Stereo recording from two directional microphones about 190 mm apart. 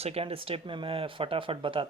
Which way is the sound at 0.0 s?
30° right (ahead or behind).